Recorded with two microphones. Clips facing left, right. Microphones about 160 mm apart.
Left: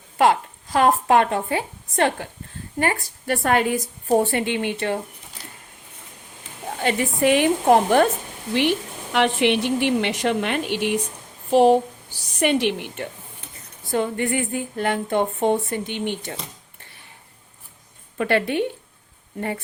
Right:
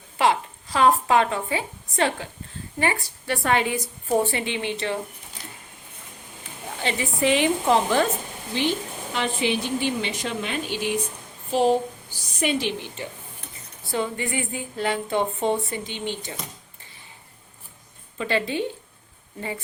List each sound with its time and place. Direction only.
0.2 s a woman's voice: 50° left (ahead or behind)
6.7 s a woman's voice: 50° left (ahead or behind)
8.5 s a woman's voice: 70° left (ahead or behind)
18.2 s a woman's voice: 60° left (ahead or behind)